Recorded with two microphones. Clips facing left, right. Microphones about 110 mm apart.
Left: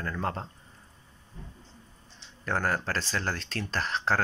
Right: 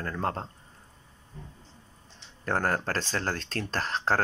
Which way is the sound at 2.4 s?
45° right (ahead or behind).